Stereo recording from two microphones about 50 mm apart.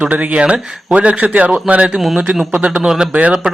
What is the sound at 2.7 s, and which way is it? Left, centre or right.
Speech, centre.